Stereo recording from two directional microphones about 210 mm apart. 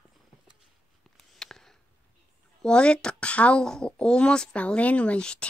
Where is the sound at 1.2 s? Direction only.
Centre (ahead or behind).